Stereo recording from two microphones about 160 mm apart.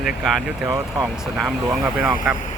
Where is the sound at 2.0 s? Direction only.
5° right (ahead or behind).